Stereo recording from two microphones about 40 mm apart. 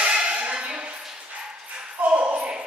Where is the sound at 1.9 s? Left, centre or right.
Right.